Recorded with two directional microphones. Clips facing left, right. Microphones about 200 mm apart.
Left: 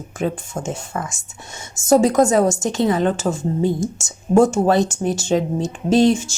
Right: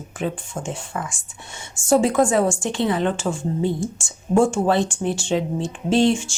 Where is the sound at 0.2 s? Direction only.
40° left (ahead or behind).